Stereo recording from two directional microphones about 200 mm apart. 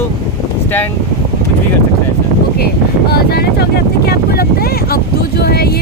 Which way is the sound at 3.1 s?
50° left (ahead or behind).